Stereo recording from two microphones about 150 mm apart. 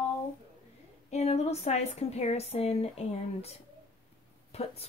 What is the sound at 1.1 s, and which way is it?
Speech, 45° left (ahead or behind).